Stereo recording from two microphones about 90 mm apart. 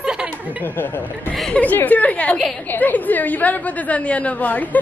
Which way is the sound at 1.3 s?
5° left (ahead or behind).